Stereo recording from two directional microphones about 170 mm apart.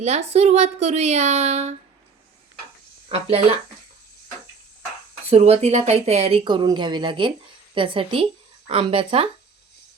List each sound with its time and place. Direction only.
0.0 s speech: 40° right (ahead or behind)
3.1 s speech: 35° right (ahead or behind)
5.3 s speech: 35° right (ahead or behind)